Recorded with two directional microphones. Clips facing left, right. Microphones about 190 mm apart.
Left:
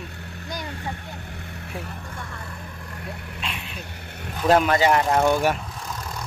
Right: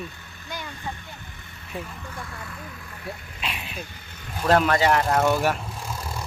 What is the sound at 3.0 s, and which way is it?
Vehicle, 65° left (ahead or behind).